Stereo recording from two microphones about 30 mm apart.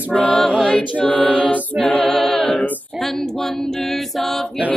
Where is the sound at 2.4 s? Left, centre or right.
Left.